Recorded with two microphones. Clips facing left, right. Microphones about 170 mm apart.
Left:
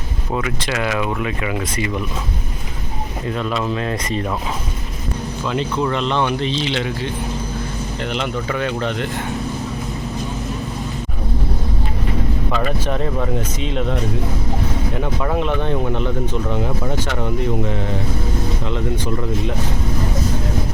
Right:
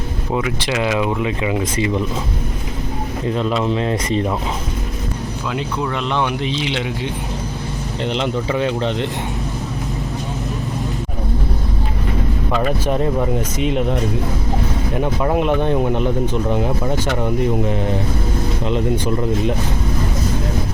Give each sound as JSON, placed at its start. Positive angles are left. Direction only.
{"t": 0.8, "sound": "speech", "side_deg": -20}
{"t": 3.2, "sound": "speech", "side_deg": -25}
{"t": 5.5, "sound": "speech", "side_deg": 0}
{"t": 6.5, "sound": "speech", "side_deg": -15}
{"t": 8.0, "sound": "speech", "side_deg": -25}
{"t": 12.8, "sound": "speech", "side_deg": -10}
{"t": 15.0, "sound": "speech", "side_deg": -15}
{"t": 18.6, "sound": "speech", "side_deg": -15}